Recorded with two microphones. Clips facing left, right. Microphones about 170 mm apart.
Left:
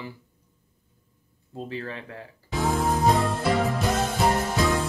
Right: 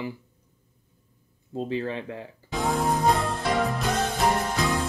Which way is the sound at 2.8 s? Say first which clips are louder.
Left 1 dB; centre (ahead or behind).